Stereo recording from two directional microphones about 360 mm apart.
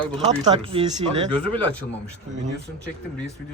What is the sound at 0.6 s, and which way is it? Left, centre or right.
Speech, centre.